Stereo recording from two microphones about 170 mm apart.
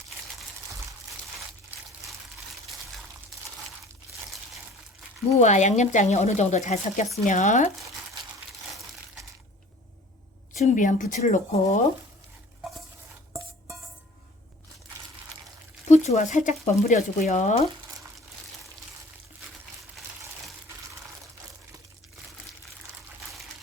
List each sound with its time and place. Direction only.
5.3 s speech: 45° left (ahead or behind)
10.6 s speech: 50° left (ahead or behind)
15.9 s speech: 45° left (ahead or behind)